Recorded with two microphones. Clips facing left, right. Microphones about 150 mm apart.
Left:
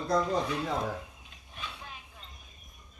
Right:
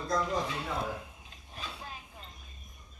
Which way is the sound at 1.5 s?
35° right (ahead or behind).